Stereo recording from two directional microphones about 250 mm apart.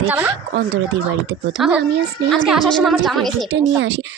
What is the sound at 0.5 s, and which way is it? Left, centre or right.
Speech, right.